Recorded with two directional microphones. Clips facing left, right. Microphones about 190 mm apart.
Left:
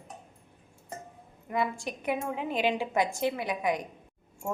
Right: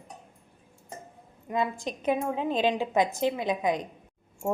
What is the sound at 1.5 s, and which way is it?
A woman's voice, 20° right (ahead or behind).